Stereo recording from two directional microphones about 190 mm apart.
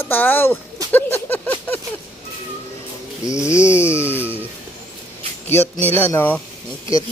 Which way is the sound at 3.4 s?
15° left (ahead or behind).